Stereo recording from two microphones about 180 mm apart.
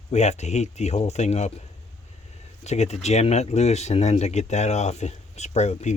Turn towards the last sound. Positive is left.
turn(degrees=40)  # may be behind; listen again after turning